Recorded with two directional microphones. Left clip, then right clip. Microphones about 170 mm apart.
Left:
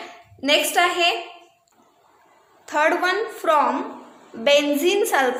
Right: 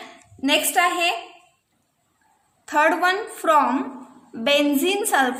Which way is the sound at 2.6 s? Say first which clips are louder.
Right 1 dB; 45° right (ahead or behind).